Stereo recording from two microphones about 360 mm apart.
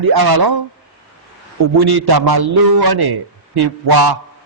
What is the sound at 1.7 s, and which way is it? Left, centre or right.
A man's voice, right.